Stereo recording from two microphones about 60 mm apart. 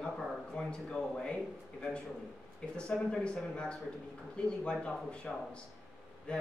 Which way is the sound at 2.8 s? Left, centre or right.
Centre.